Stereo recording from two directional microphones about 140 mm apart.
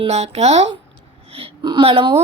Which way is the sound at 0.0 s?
50° right (ahead or behind).